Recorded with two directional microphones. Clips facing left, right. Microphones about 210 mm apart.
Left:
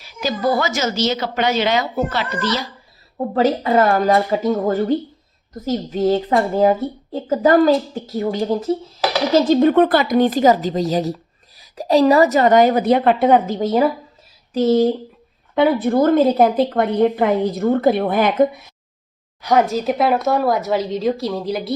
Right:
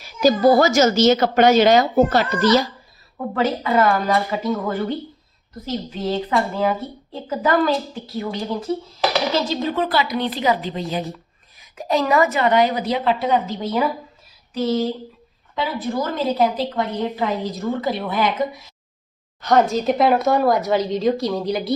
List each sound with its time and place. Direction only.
0.0 s a woman's voice: 40° right (ahead or behind)
3.2 s speech: 35° left (ahead or behind)
15.5 s a woman's voice: 60° left (ahead or behind)
19.4 s speech: 10° left (ahead or behind)